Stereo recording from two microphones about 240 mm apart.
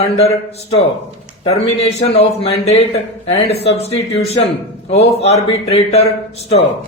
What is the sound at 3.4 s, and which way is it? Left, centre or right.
Speech, left.